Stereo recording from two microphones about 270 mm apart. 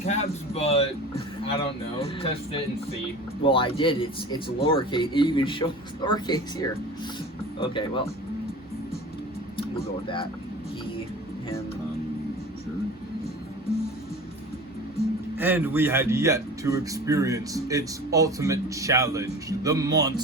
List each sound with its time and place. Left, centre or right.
0.0 s speech: left
15.4 s a man's voice: centre